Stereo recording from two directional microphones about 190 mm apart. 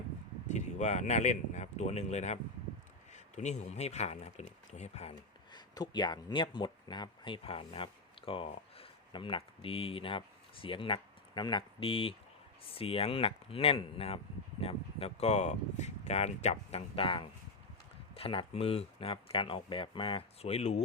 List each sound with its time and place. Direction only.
0.4 s speech: 40° left (ahead or behind)
5.5 s speech: 20° left (ahead or behind)